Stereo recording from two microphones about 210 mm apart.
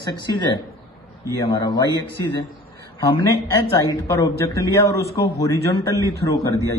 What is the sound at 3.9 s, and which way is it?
A man's voice, 15° left (ahead or behind).